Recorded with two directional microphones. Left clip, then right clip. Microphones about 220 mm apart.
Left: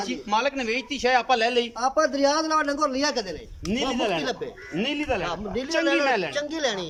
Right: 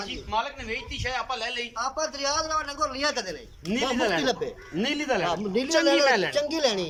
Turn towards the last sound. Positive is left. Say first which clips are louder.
# right 2 dB
turn(degrees=0)  # may be behind; listen again after turning